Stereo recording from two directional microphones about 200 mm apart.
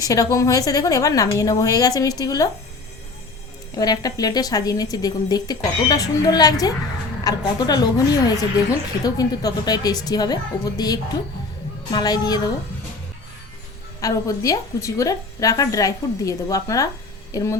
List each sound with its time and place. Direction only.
0.0 s a woman's voice: 15° left (ahead or behind)
3.8 s a woman's voice: 20° left (ahead or behind)
14.0 s a woman's voice: 15° left (ahead or behind)